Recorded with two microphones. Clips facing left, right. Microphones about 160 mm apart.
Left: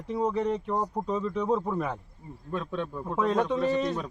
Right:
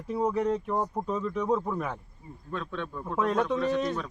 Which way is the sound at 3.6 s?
10° left (ahead or behind).